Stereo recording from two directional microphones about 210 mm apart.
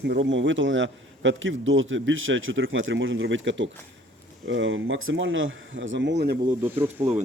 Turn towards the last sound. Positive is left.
turn(degrees=-10)  # may be behind; listen again after turning